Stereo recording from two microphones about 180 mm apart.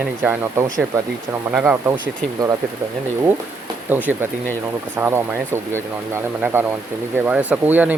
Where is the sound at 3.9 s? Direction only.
10° right (ahead or behind).